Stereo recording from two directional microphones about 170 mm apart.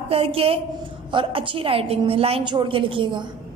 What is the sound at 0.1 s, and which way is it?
A woman's voice, 35° right (ahead or behind).